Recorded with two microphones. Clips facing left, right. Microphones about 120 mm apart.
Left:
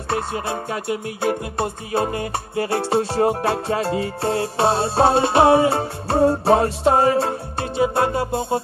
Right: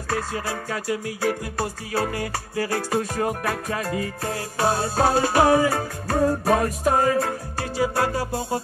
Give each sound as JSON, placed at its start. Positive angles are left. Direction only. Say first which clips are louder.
{"t": 0.1, "sound": "music", "louder": "left 3 dB", "side_deg": 25}